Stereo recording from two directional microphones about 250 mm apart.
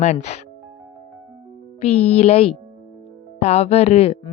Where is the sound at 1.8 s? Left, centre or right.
Left.